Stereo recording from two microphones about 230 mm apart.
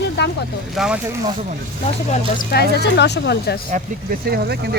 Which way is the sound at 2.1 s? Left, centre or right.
Left.